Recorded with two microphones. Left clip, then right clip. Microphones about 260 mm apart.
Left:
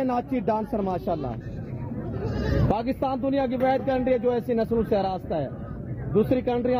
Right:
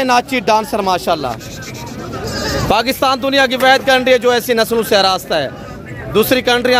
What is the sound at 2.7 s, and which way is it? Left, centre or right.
Speech, centre.